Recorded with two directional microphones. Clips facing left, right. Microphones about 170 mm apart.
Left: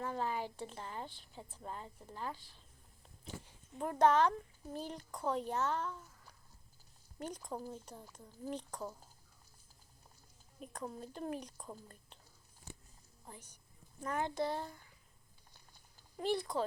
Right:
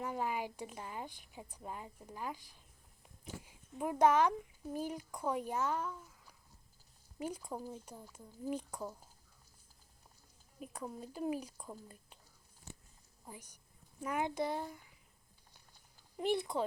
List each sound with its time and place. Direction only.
0.0 s speech: 10° right (ahead or behind)
7.2 s speech: 10° right (ahead or behind)
10.6 s speech: 5° right (ahead or behind)
13.2 s a woman's voice: 10° right (ahead or behind)
16.1 s speech: 20° right (ahead or behind)